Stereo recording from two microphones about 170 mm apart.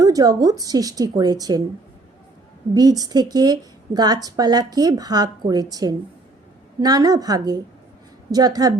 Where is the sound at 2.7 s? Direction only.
25° right (ahead or behind).